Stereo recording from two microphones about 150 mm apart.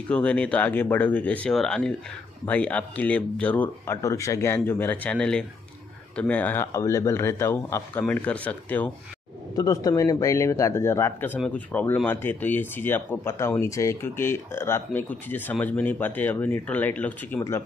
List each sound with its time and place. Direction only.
0.1 s speech: 10° left (ahead or behind)
9.6 s speech: 25° left (ahead or behind)